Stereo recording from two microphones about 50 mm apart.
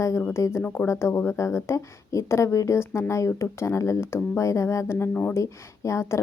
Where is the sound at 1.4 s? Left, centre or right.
Left.